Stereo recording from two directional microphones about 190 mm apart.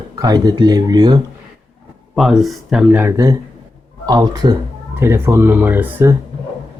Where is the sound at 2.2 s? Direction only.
Centre (ahead or behind).